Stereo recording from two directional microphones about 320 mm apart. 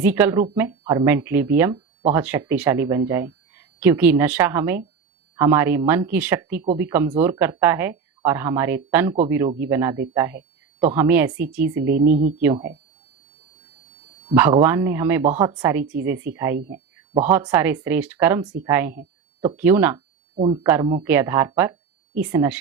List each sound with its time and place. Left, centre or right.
0.0 s a woman's voice: centre
11.9 s speech: right
14.3 s speech: centre
16.6 s speech: right
17.2 s speech: centre